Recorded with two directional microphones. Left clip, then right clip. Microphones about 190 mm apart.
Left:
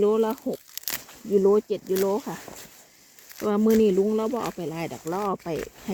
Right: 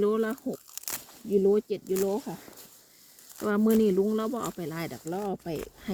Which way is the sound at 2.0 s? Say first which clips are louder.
Left 4 dB; 20° left (ahead or behind).